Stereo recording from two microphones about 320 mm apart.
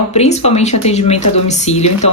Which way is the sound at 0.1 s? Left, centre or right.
Centre.